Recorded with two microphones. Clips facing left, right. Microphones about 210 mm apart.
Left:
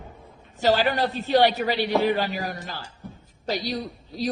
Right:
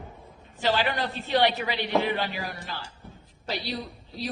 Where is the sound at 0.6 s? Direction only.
40° left (ahead or behind).